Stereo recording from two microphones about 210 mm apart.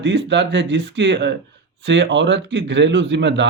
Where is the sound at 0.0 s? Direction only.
55° right (ahead or behind).